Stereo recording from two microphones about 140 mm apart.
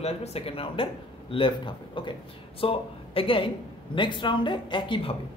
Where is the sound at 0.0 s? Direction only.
45° left (ahead or behind).